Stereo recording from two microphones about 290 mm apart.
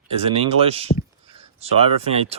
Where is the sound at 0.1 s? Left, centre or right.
Centre.